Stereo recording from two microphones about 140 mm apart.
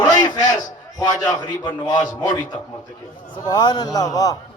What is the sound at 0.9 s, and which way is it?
A man's voice, 25° left (ahead or behind).